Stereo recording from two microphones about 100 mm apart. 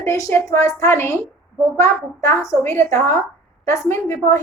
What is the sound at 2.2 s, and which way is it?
A woman's voice, 35° left (ahead or behind).